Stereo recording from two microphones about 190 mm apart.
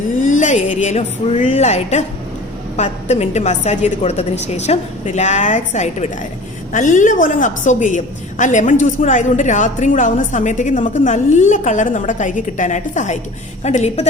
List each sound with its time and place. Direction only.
0.2 s a woman's voice: 40° left (ahead or behind)